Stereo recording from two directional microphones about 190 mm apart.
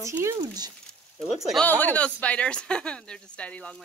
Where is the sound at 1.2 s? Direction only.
Centre (ahead or behind).